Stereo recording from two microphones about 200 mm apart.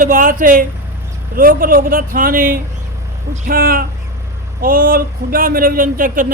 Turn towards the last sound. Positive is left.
turn(degrees=-45)  # may be behind; listen again after turning